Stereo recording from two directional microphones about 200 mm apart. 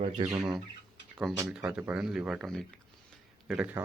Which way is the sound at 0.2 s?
20° right (ahead or behind).